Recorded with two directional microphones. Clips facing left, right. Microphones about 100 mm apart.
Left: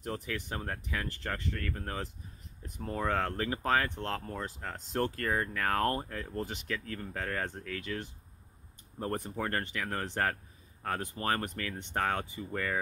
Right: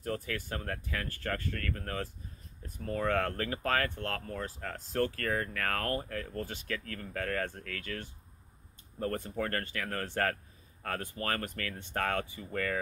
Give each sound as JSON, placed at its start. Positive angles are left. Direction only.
{"t": 0.0, "sound": "speech", "side_deg": 25}